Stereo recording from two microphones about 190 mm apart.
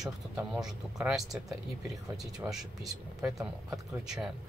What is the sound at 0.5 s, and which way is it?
Speech, centre (ahead or behind).